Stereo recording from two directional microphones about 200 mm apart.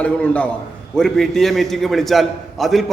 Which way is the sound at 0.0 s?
5° left (ahead or behind).